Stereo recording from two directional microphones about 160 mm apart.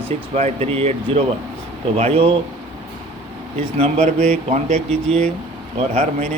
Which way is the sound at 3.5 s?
40° right (ahead or behind).